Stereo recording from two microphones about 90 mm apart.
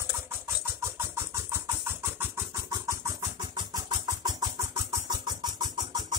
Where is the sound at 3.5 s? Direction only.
55° right (ahead or behind).